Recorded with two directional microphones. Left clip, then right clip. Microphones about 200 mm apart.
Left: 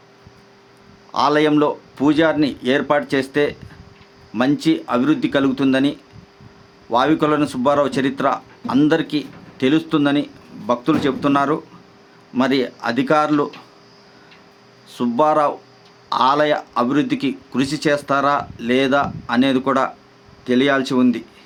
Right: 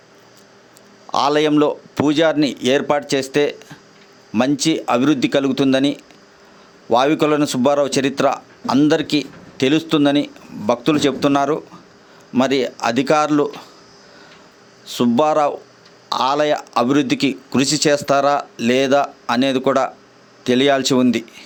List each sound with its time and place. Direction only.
1.1 s speech: 40° right (ahead or behind)
14.8 s speech: 30° right (ahead or behind)